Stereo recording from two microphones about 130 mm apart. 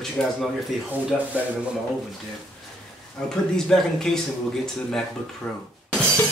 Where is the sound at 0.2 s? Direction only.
5° left (ahead or behind).